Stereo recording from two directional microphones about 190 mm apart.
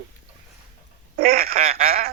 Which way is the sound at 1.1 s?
50° right (ahead or behind).